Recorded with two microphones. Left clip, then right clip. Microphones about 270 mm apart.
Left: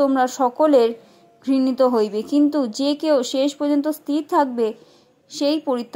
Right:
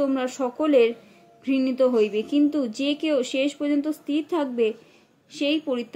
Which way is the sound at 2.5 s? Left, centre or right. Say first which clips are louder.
Left 4 dB; centre.